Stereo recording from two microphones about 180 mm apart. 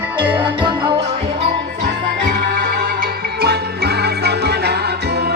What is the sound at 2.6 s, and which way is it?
Music, 55° right (ahead or behind).